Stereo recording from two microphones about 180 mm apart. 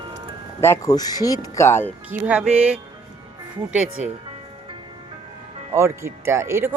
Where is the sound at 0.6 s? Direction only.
15° left (ahead or behind).